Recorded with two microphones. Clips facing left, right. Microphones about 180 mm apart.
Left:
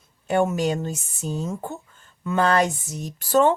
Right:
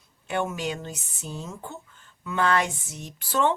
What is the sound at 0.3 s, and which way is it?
A woman's voice, 40° left (ahead or behind).